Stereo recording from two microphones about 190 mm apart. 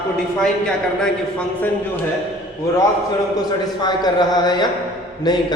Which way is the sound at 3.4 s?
20° left (ahead or behind).